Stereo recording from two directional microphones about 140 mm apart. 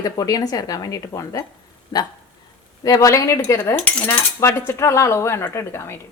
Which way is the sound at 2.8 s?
25° left (ahead or behind).